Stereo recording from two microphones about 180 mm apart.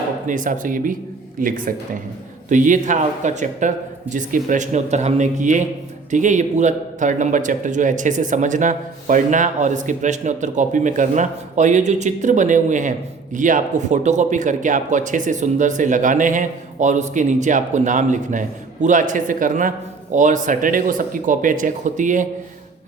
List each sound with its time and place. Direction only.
0.3 s a man's voice: 45° right (ahead or behind)